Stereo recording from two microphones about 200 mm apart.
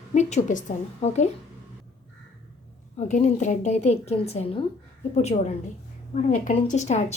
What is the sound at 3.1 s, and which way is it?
A woman's voice, 35° left (ahead or behind).